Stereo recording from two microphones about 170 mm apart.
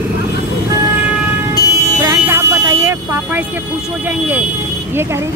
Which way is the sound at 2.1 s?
15° right (ahead or behind).